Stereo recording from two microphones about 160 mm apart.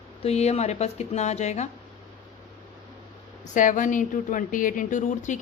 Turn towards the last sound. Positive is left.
turn(degrees=50)  # may be behind; listen again after turning